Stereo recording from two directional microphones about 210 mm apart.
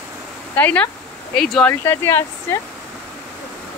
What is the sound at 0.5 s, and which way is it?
Speech, 10° left (ahead or behind).